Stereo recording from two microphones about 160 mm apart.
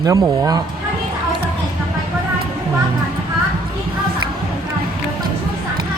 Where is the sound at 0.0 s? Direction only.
20° right (ahead or behind).